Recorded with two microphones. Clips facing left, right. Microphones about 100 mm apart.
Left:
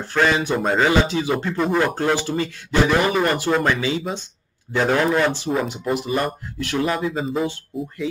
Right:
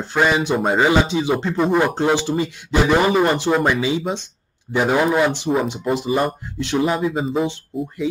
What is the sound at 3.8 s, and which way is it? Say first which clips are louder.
A man's voice: right 3 dB; 20° right (ahead or behind).